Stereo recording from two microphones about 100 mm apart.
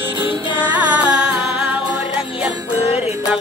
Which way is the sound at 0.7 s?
15° right (ahead or behind).